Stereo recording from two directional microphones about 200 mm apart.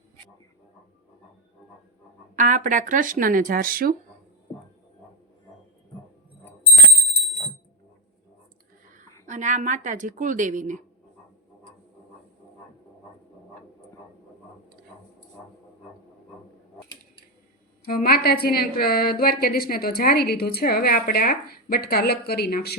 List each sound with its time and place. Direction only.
2.3 s speech: 40° right (ahead or behind)
9.2 s speech: 40° right (ahead or behind)
17.8 s a woman's voice: 45° left (ahead or behind)